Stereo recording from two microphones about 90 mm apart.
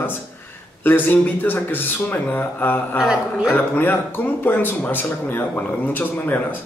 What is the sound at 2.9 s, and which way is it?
Speech, 5° right (ahead or behind).